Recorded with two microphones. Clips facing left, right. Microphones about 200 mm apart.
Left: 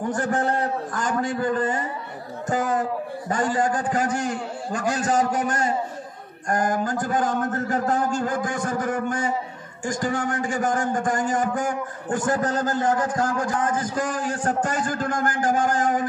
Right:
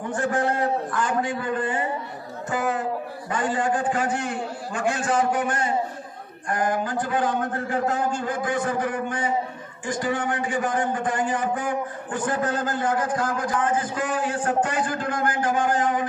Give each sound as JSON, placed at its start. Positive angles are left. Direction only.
{"t": 0.1, "sound": "a man's voice", "side_deg": 40}